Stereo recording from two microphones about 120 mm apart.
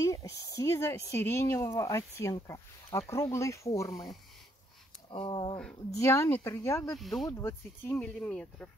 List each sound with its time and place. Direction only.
0.0 s speech: 30° left (ahead or behind)
5.1 s speech: 45° left (ahead or behind)
5.9 s speech: 25° left (ahead or behind)
6.9 s speech: centre (ahead or behind)
7.2 s speech: 20° left (ahead or behind)
7.9 s speech: 10° left (ahead or behind)